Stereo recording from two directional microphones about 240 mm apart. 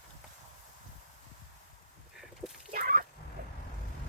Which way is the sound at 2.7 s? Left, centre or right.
Right.